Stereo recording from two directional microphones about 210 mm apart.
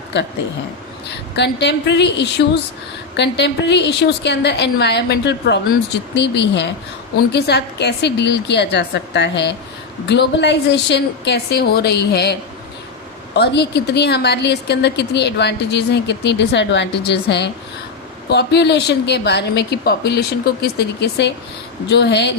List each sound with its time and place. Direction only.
0.1 s a woman's voice: 55° left (ahead or behind)
1.4 s a woman's voice: 55° left (ahead or behind)